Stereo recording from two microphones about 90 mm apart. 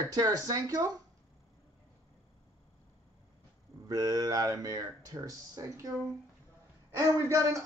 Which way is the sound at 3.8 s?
45° right (ahead or behind).